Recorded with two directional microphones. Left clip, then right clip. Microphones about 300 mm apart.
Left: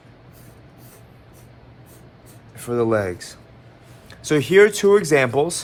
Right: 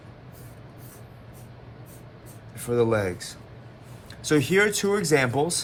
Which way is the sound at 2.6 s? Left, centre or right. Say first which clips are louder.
Left 3 dB; left.